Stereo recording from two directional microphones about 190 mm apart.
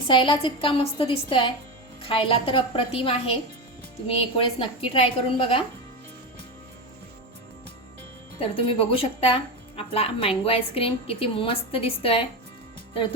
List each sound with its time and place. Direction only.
0.1 s a woman's voice: 25° left (ahead or behind)
2.0 s a woman's voice: 30° left (ahead or behind)
8.4 s a woman's voice: 30° left (ahead or behind)